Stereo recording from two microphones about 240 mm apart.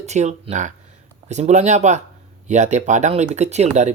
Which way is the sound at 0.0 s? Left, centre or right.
Right.